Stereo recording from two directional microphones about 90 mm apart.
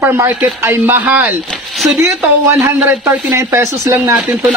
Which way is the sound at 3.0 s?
30° right (ahead or behind).